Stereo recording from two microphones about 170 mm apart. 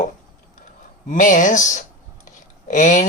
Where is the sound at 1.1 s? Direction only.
50° left (ahead or behind).